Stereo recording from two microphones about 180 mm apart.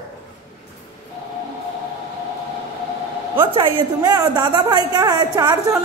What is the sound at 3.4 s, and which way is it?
A woman's voice, 25° right (ahead or behind).